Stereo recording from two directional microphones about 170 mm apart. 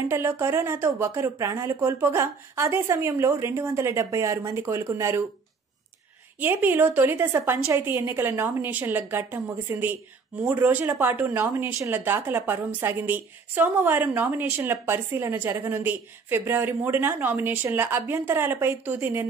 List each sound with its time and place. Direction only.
0.1 s speech: 15° right (ahead or behind)
6.4 s speech: 10° right (ahead or behind)